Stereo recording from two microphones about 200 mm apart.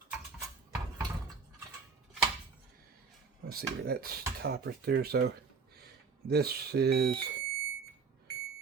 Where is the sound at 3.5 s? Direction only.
50° right (ahead or behind).